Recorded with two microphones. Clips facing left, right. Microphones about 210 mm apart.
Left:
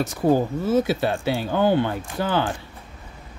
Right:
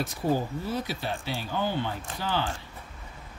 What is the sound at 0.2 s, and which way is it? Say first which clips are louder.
Speech: left 8 dB; 55° left (ahead or behind).